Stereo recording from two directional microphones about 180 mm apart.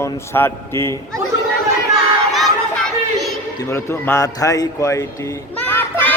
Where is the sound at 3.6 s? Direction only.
15° left (ahead or behind).